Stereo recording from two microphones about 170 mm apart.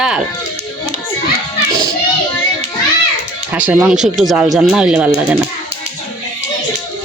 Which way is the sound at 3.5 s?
10° right (ahead or behind).